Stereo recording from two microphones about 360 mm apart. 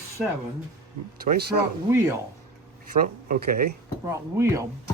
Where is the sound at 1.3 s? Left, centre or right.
Right.